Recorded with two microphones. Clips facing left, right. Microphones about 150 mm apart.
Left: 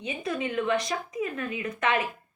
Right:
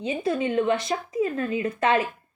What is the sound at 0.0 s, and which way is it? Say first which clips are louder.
A woman's voice: right 6 dB; 30° right (ahead or behind).